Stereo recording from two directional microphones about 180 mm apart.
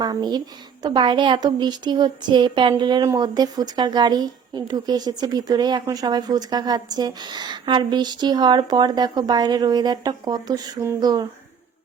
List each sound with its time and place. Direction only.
0.0 s speech: 25° right (ahead or behind)